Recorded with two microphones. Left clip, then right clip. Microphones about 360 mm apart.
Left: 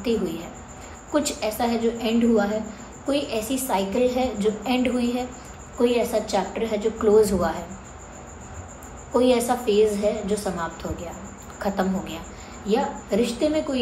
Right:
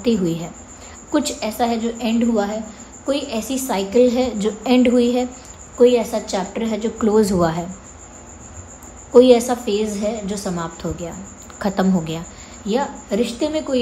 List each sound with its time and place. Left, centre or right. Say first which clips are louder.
1.1 s a woman's voice: right 3 dB; right
9.1 s a woman's voice: right 8 dB; right